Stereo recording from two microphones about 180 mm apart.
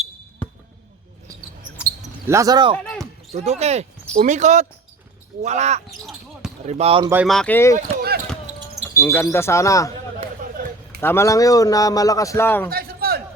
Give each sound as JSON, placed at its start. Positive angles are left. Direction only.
{"t": 2.2, "sound": "speech", "side_deg": -15}
{"t": 3.3, "sound": "speech", "side_deg": -35}
{"t": 7.0, "sound": "speech", "side_deg": -10}
{"t": 7.3, "sound": "speech", "side_deg": 5}
{"t": 7.8, "sound": "run", "side_deg": -60}
{"t": 8.9, "sound": "speech", "side_deg": 15}
{"t": 10.6, "sound": "a sound", "side_deg": -50}
{"t": 11.0, "sound": "a man's voice", "side_deg": 15}
{"t": 12.7, "sound": "a sound", "side_deg": -60}